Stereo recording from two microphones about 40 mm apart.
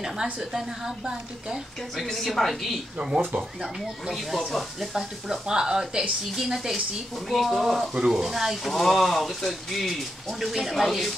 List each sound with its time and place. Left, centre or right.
0.0 s a woman's voice: centre
2.0 s speech: centre
4.5 s speech: centre
4.9 s a woman's voice: centre
7.2 s speech: centre
8.0 s a woman's voice: centre
8.7 s speech: centre